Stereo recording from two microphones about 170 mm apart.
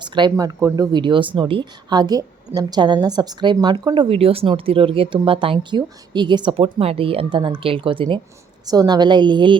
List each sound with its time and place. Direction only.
0.0 s speech: 25° right (ahead or behind)